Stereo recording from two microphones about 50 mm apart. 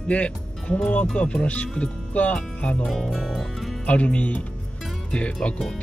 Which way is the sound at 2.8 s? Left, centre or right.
Centre.